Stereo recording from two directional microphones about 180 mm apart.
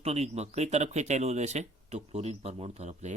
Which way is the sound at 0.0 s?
35° right (ahead or behind).